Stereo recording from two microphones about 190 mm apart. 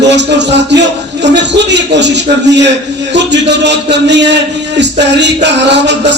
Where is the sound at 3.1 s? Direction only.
65° right (ahead or behind).